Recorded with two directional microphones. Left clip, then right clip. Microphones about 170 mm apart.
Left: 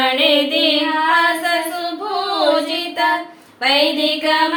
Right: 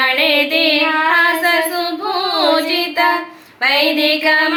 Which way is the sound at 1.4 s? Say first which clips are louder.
Right 4 dB; 20° left (ahead or behind).